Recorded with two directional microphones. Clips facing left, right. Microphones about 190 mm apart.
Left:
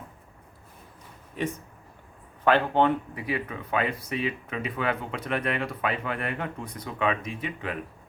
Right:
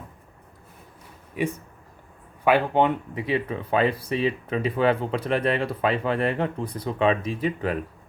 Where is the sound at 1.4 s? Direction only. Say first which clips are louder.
Right 4 dB; 10° right (ahead or behind); by 7.8 s 35° right (ahead or behind).